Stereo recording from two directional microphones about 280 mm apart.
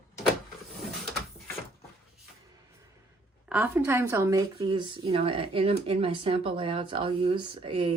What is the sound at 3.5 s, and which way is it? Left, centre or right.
A woman's voice, centre.